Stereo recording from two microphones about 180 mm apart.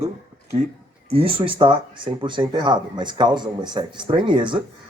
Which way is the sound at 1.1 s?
30° right (ahead or behind).